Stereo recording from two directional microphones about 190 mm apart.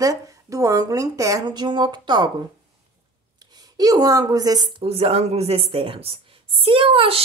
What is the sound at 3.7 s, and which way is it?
A woman's voice, 20° right (ahead or behind).